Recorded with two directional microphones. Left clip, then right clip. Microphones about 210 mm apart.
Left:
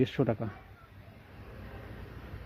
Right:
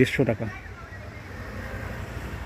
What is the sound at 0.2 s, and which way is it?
Speech, 25° left (ahead or behind).